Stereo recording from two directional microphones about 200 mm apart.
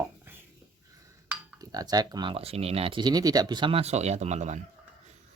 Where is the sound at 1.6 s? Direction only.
20° right (ahead or behind); by 4.6 s 35° right (ahead or behind).